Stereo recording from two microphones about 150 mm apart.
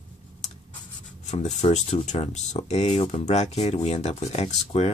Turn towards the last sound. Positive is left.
turn(degrees=45)  # may be behind; listen again after turning